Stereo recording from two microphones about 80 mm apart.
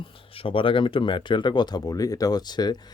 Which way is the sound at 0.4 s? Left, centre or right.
Left.